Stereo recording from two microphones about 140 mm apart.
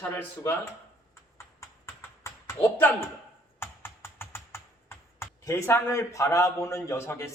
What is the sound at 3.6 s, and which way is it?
Computer keyboard, 15° left (ahead or behind).